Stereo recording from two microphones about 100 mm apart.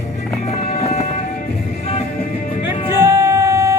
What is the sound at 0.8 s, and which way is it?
Music, 90° left.